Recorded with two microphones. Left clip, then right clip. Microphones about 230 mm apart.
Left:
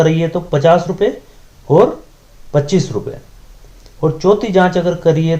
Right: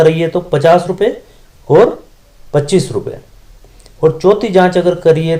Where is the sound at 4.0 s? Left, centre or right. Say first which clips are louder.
Right 3 dB; right.